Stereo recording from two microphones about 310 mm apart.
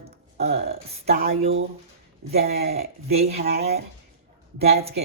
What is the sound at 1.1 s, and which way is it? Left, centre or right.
A man's voice, right.